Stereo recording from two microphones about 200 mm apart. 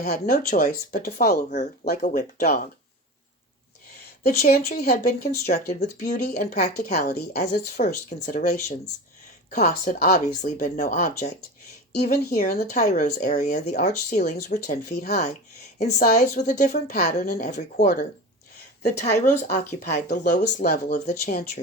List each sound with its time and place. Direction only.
0.0 s speech: 40° left (ahead or behind)
4.4 s speech: 45° left (ahead or behind)
19.8 s speech: 55° left (ahead or behind)